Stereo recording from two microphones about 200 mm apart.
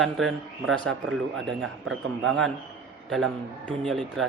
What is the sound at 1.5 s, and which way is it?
Speech, centre (ahead or behind).